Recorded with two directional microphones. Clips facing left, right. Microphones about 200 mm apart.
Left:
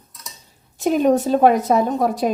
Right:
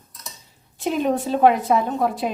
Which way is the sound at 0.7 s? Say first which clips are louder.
Left 5 dB; 45° left (ahead or behind).